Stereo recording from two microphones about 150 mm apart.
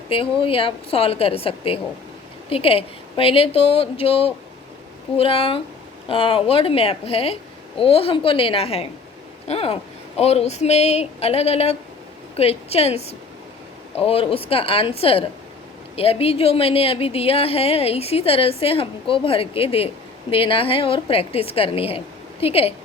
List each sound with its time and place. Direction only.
0.1 s a woman's voice: 35° left (ahead or behind)